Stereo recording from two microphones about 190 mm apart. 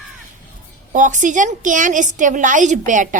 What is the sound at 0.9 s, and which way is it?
A woman's voice, 40° right (ahead or behind).